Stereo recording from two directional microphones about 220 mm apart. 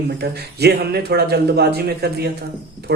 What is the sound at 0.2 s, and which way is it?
Speech, 45° right (ahead or behind).